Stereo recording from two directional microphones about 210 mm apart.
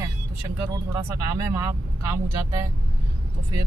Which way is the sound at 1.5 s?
15° right (ahead or behind).